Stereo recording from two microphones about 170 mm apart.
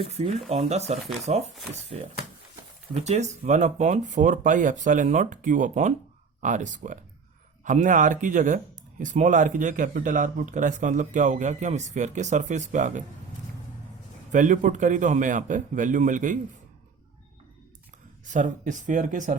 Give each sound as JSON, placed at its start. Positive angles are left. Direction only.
{"t": 0.1, "sound": "speech", "side_deg": -40}
{"t": 14.3, "sound": "speech", "side_deg": -50}
{"t": 18.3, "sound": "speech", "side_deg": -45}